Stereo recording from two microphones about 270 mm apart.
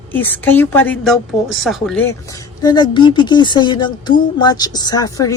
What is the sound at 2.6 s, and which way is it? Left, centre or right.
A woman's voice, centre.